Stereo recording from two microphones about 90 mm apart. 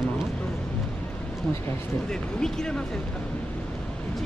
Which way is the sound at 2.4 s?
5° left (ahead or behind).